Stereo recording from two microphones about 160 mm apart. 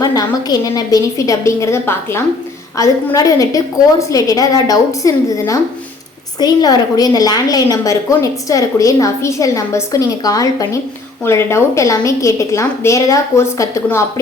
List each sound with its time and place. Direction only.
0.0 s a woman's voice: 25° left (ahead or behind)